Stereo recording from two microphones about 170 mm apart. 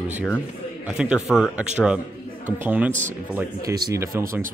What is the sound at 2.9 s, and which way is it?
Speech, 45° right (ahead or behind).